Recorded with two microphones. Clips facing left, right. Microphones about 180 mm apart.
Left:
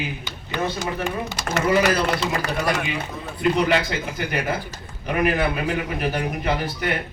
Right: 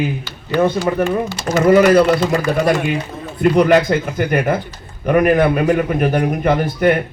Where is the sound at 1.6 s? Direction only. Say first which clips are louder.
Right 10 dB; 55° right (ahead or behind).